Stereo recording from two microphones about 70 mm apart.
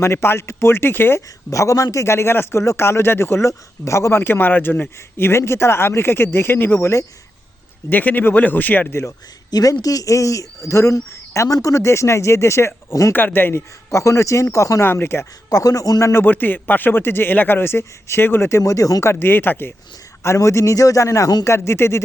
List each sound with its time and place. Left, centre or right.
0.0 s a man's voice: left
1.5 s a man's voice: left
8.9 s speech: left
9.5 s speech: left
13.1 s speech: left
13.9 s speech: left
14.8 s a man's voice: left
15.4 s a man's voice: left
16.2 s a man's voice: left
19.2 s speech: left
20.2 s speech: left
21.4 s a man's voice: left